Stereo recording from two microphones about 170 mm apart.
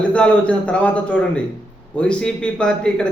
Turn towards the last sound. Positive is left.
turn(degrees=5)  # may be behind; listen again after turning